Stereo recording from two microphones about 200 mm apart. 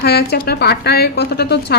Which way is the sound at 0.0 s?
50° left (ahead or behind).